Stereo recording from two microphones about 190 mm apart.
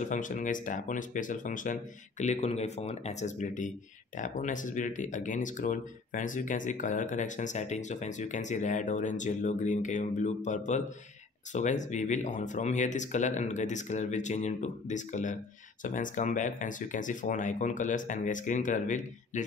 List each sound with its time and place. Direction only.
0.0 s speech: 40° left (ahead or behind)